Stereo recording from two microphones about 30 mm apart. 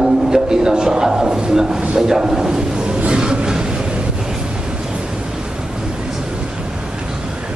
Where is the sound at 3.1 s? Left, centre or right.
Right.